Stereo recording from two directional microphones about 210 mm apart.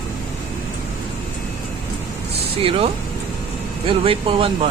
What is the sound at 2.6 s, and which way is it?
Speech, 25° right (ahead or behind).